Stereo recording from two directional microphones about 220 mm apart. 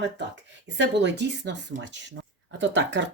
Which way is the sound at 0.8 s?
50° right (ahead or behind).